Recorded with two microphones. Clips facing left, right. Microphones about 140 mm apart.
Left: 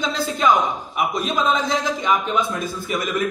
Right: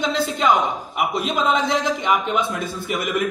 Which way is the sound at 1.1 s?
20° right (ahead or behind).